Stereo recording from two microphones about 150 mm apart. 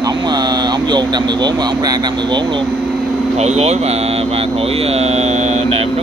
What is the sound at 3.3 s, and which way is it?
Speech, 45° right (ahead or behind).